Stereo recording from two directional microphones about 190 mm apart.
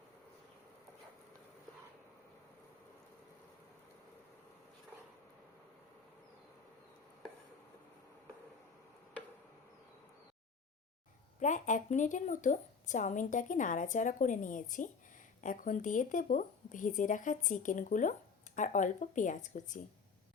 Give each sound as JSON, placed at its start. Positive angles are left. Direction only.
{"t": 11.3, "sound": "speech", "side_deg": 40}